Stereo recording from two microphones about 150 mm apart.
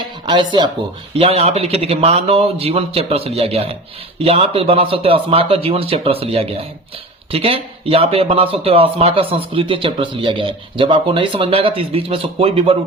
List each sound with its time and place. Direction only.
0.3 s a man's voice: 30° right (ahead or behind)